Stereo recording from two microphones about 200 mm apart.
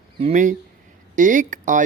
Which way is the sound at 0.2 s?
35° right (ahead or behind).